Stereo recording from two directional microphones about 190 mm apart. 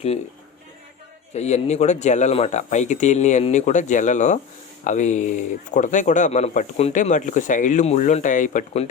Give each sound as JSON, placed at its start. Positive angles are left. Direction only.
{"t": 1.3, "sound": "speech", "side_deg": 35}